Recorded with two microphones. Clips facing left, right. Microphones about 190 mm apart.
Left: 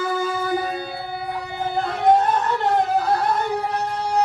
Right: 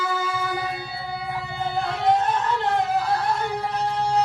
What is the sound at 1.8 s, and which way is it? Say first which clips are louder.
Music: left 5 dB; 50° left (ahead or behind).